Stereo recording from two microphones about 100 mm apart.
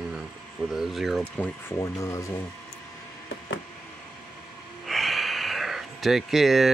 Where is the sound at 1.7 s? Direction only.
30° left (ahead or behind).